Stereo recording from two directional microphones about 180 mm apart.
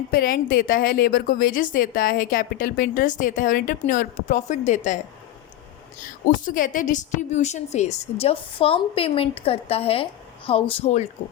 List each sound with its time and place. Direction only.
0.1 s a woman's voice: 55° left (ahead or behind)
6.2 s a woman's voice: 50° left (ahead or behind)